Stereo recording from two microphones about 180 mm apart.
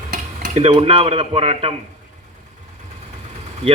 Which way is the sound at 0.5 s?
35° right (ahead or behind).